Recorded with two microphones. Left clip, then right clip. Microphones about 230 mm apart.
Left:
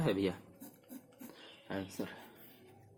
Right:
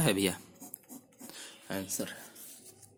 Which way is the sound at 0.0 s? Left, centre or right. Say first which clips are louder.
Right 4 dB; right.